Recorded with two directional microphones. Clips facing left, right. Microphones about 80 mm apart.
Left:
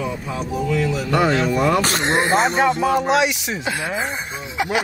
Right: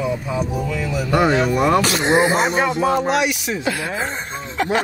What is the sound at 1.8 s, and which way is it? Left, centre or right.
Speech, left.